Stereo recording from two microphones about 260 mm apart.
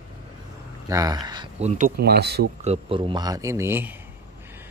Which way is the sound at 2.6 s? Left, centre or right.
Right.